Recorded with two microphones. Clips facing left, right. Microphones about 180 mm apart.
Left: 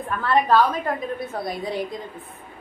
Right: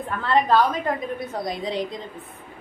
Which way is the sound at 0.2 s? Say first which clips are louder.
Left 1 dB; 20° right (ahead or behind).